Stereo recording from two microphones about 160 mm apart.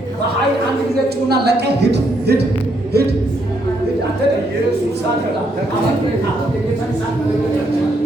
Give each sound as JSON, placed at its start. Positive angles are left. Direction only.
{"t": 1.3, "sound": "speech", "side_deg": -90}